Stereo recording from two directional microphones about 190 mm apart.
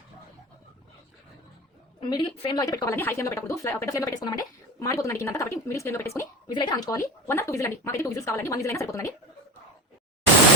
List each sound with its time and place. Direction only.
2.0 s speech: 25° left (ahead or behind)